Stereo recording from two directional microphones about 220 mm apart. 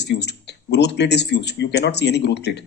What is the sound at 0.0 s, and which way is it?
Speech, 50° left (ahead or behind).